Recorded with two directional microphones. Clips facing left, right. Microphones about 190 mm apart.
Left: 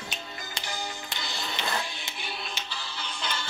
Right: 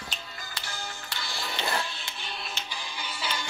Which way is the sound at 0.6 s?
20° left (ahead or behind).